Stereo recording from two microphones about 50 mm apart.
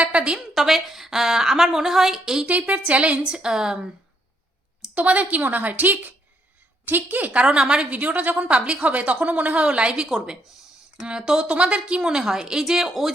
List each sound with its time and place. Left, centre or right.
0.0 s a sound: right
0.3 s a woman's voice: centre
2.5 s a woman's voice: right
4.9 s a woman's voice: right
7.4 s a woman's voice: centre
7.9 s a woman's voice: right
9.6 s a woman's voice: centre